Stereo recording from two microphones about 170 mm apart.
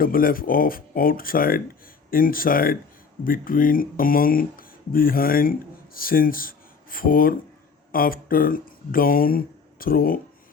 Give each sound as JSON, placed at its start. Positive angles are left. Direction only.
{"t": 0.0, "sound": "speech", "side_deg": 60}